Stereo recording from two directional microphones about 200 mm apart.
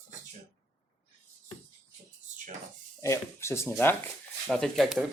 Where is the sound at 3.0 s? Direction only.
15° left (ahead or behind).